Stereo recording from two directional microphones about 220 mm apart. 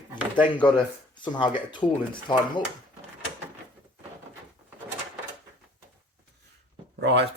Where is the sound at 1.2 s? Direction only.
20° left (ahead or behind).